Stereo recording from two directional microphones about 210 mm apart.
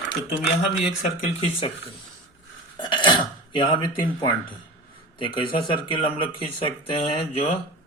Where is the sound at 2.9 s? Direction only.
20° left (ahead or behind).